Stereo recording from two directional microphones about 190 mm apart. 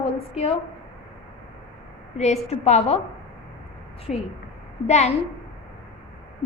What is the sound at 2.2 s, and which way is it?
Speech, 35° left (ahead or behind).